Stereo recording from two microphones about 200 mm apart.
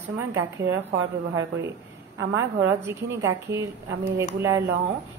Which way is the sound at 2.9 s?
15° right (ahead or behind).